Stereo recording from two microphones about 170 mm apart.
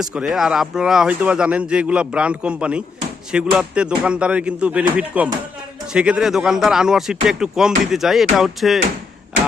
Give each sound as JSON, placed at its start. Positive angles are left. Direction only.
{"t": 0.0, "sound": "speech", "side_deg": -5}